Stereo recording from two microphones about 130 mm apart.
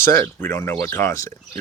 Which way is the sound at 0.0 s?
20° left (ahead or behind).